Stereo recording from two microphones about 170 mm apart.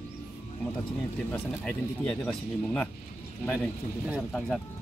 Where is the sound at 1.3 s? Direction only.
5° left (ahead or behind).